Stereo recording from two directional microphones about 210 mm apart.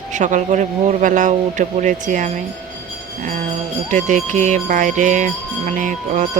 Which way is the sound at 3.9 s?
35° right (ahead or behind).